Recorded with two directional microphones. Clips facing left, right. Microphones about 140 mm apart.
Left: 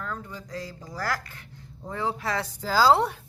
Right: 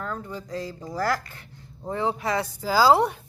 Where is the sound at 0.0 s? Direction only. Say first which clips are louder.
Right 3 dB; 35° right (ahead or behind); by 3.2 s 15° right (ahead or behind).